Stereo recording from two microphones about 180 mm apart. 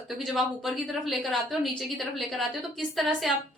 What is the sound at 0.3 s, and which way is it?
A woman's voice, centre (ahead or behind).